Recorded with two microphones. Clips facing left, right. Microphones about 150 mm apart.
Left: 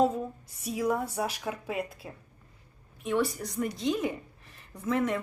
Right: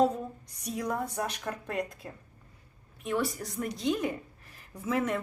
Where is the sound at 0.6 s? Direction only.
5° left (ahead or behind).